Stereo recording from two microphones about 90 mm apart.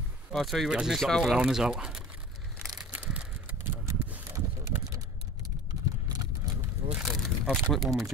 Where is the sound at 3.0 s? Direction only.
15° right (ahead or behind).